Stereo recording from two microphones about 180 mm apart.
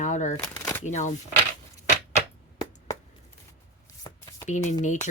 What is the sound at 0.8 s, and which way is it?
Speech, 40° left (ahead or behind).